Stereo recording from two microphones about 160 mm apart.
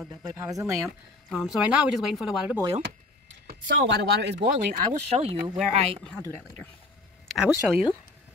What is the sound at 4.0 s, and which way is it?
Speech, 90° right.